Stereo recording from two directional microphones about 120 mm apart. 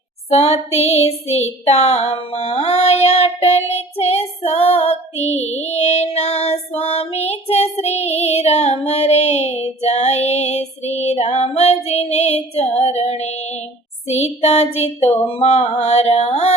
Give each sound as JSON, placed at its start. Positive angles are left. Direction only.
{"t": 0.3, "sound": "child singing", "side_deg": 60}
{"t": 15.3, "sound": "mantra", "side_deg": 60}